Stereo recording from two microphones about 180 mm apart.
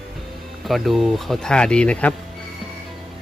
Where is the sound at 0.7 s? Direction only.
Centre (ahead or behind).